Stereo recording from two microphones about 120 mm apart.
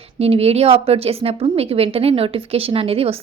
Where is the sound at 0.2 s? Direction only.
55° right (ahead or behind).